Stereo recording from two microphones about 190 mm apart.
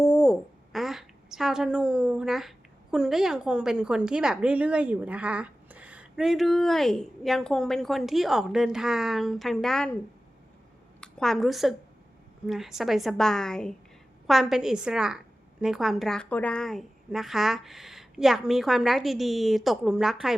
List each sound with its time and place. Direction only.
0.0 s a woman's voice: 10° left (ahead or behind)
11.0 s a woman's voice: centre (ahead or behind)